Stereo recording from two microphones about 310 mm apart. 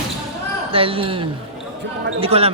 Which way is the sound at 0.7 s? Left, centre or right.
Centre.